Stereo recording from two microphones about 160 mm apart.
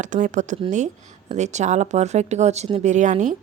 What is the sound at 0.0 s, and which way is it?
Speech, 55° right (ahead or behind).